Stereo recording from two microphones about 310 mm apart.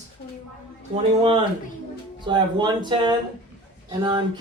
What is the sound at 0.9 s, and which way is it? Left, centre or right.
A man's voice, centre.